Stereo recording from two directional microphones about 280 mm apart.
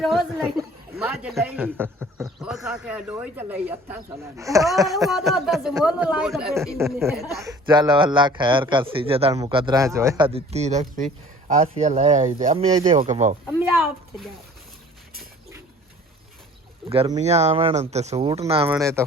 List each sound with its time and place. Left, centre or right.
0.0 s a man's voice: centre
4.9 s a man's voice: centre
7.3 s a man's voice: centre
16.9 s a man's voice: right
18.7 s a man's voice: centre